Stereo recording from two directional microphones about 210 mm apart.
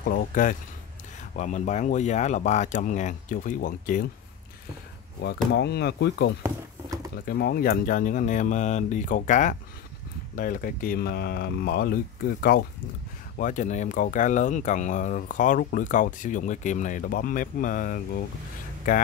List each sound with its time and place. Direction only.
0.0 s speech: 45° left (ahead or behind)
5.5 s speech: 50° left (ahead or behind)
6.4 s a sound: 15° right (ahead or behind)
7.2 s speech: 50° left (ahead or behind)